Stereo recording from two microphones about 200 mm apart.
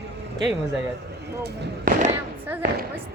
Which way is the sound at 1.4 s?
55° right (ahead or behind).